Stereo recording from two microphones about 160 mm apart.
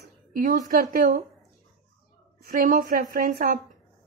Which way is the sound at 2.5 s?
60° right (ahead or behind).